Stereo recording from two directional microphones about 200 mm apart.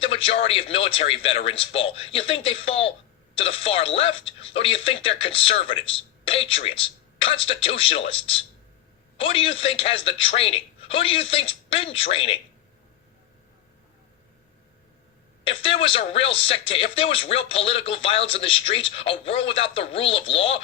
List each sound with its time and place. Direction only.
0.0 s speech: 25° left (ahead or behind)
15.4 s speech: 25° left (ahead or behind)